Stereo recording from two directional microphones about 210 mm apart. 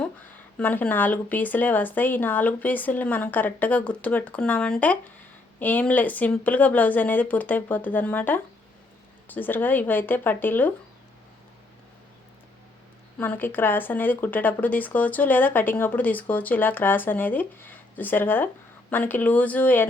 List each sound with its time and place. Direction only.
0.6 s speech: 10° left (ahead or behind)
13.1 s speech: 10° left (ahead or behind)